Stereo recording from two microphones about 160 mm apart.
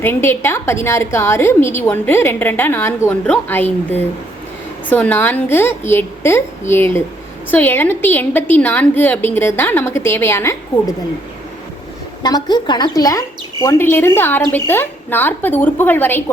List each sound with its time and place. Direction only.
0.0 s a woman's voice: 15° left (ahead or behind)
12.2 s a woman's voice: 25° left (ahead or behind)